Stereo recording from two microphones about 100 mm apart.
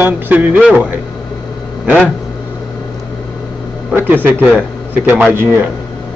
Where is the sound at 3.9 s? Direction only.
20° right (ahead or behind).